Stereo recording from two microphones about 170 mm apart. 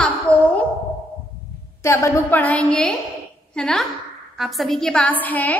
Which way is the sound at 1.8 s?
15° left (ahead or behind).